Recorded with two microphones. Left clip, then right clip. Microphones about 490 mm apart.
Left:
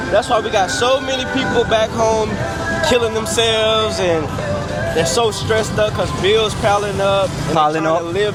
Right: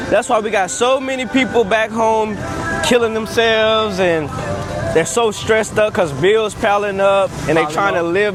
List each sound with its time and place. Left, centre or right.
0.1 s speech: right
5.7 s speech: right